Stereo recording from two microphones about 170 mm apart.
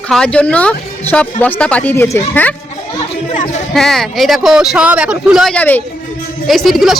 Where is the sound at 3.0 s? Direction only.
45° left (ahead or behind).